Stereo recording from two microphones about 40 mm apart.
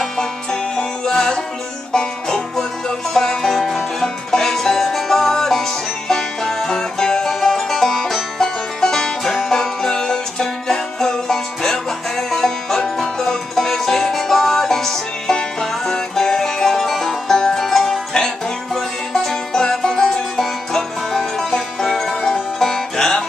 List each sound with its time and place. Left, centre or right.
0.0 s music: centre
17.4 s music: centre